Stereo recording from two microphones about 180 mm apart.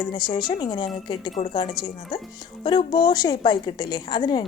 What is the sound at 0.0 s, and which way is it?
A woman's voice, 25° left (ahead or behind).